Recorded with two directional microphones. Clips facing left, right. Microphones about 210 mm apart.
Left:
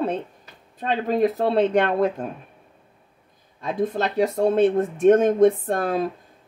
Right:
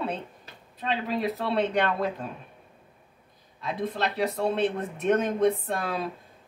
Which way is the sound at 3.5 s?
45° left (ahead or behind).